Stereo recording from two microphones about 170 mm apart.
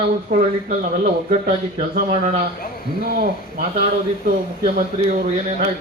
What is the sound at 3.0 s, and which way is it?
Speech, 65° right (ahead or behind).